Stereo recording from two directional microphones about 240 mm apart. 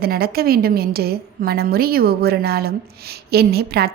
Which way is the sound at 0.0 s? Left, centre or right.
Right.